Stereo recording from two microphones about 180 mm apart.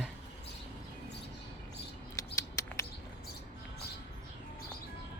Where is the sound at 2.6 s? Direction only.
15° left (ahead or behind).